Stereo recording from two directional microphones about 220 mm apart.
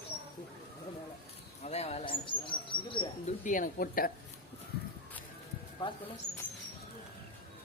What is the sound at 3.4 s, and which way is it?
Speech, 35° left (ahead or behind).